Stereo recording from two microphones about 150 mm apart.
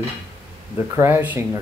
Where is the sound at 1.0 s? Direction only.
15° right (ahead or behind).